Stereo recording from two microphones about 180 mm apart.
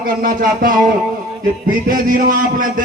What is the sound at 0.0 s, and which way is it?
A man's voice, 50° right (ahead or behind).